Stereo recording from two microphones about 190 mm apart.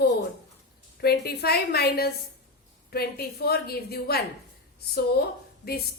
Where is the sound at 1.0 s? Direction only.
55° left (ahead or behind).